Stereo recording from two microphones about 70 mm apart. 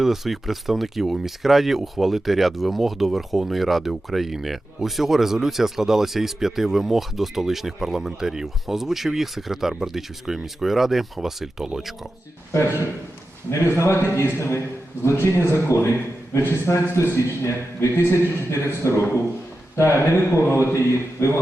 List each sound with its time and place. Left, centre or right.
0.0 s speech: centre
12.5 s a man's voice: left